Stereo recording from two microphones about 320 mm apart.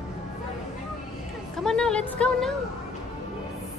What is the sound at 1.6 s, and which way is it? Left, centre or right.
Music, centre.